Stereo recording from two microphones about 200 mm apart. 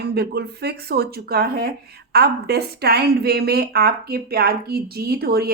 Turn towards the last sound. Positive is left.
turn(degrees=-50)  # may be behind; listen again after turning